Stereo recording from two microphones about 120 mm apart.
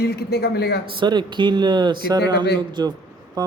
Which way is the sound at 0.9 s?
40° right (ahead or behind).